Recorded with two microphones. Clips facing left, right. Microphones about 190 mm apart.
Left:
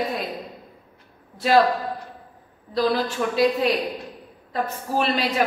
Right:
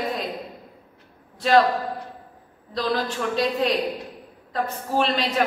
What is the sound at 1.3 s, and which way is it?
Speech, 5° left (ahead or behind).